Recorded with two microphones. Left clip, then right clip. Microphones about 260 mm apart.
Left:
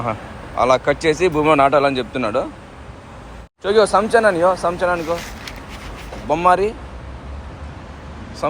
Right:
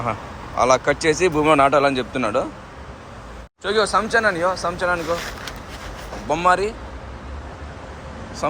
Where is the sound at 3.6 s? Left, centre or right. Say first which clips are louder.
Left 5 dB; centre.